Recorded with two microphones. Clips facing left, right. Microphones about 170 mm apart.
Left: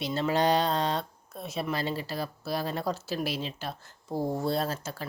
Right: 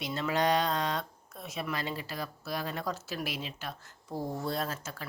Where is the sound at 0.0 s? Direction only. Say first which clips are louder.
Left 4 dB; 30° left (ahead or behind).